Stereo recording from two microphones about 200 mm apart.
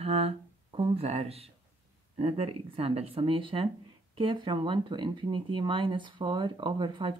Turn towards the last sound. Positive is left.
turn(degrees=-25)  # may be behind; listen again after turning